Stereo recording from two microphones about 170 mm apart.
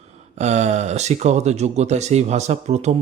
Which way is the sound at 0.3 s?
40° right (ahead or behind).